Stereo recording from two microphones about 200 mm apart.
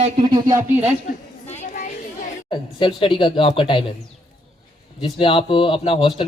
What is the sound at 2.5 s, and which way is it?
A man's voice, 25° left (ahead or behind).